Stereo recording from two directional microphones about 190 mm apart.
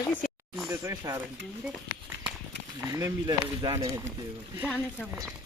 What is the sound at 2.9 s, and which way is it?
Speech, 20° right (ahead or behind).